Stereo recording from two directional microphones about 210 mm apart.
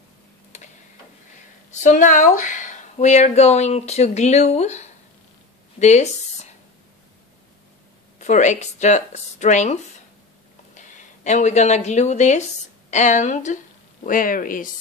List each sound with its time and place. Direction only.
0.5 s tick-tock: 35° left (ahead or behind)
1.7 s speech: 35° left (ahead or behind)
8.2 s speech: 35° left (ahead or behind)